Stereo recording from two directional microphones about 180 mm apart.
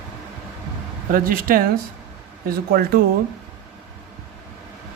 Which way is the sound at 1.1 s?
50° right (ahead or behind).